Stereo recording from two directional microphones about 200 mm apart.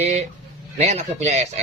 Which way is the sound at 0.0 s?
35° right (ahead or behind).